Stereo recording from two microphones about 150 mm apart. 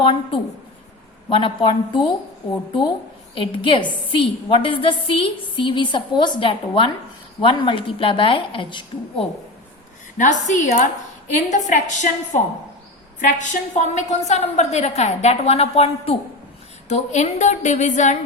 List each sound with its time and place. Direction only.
0.0 s a woman's voice: 35° left (ahead or behind)
3.3 s a woman's voice: 35° left (ahead or behind)
10.2 s a woman's voice: 55° left (ahead or behind)